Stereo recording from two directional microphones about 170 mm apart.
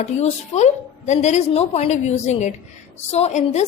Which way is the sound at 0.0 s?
40° left (ahead or behind).